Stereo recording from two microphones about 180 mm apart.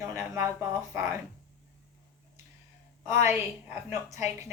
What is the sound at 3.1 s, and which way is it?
A woman's voice, 15° right (ahead or behind).